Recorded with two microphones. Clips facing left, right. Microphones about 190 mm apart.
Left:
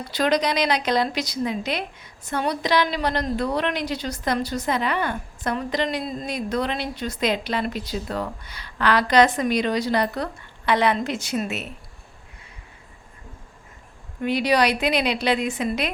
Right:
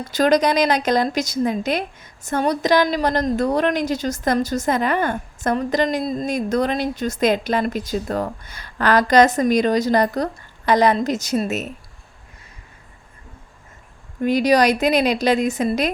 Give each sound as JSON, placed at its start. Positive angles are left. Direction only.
{"t": 0.0, "sound": "a woman's voice", "side_deg": -45}
{"t": 14.2, "sound": "a woman's voice", "side_deg": -45}